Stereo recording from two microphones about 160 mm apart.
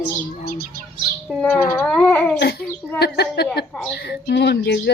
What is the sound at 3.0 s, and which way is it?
Speech, 90° left.